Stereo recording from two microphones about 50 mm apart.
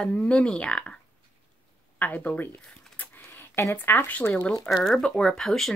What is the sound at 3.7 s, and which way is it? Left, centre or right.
Speech, left.